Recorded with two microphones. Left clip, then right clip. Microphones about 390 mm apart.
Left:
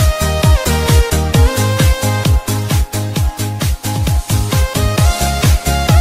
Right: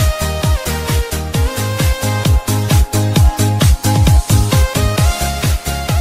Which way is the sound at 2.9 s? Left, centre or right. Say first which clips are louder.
Right 4 dB; right.